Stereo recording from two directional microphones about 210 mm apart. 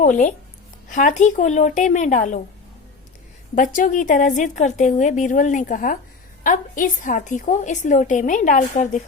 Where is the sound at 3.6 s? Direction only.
40° left (ahead or behind).